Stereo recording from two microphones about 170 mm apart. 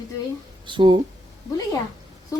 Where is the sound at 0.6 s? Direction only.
30° right (ahead or behind).